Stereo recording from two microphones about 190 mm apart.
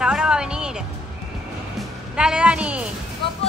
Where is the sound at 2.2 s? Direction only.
5° right (ahead or behind).